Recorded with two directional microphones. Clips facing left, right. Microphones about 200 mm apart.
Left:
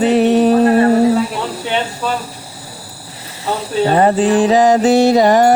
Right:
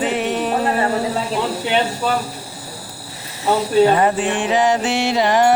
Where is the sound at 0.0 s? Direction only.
35° left (ahead or behind).